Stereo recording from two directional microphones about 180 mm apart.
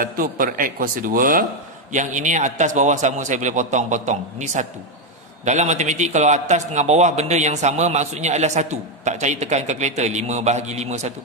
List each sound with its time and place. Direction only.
0.0 s a man's voice: 50° right (ahead or behind)